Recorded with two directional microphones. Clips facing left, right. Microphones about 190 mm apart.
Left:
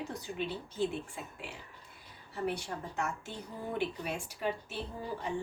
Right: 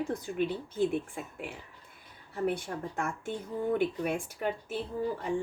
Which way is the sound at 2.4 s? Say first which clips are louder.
Right 4 dB; 50° right (ahead or behind).